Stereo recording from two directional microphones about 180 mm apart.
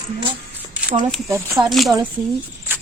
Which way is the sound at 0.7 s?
5° right (ahead or behind).